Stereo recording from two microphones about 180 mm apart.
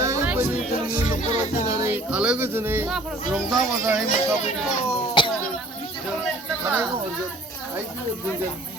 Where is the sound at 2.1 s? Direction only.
5° right (ahead or behind).